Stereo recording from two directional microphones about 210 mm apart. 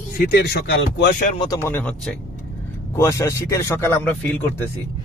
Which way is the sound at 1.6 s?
10° left (ahead or behind).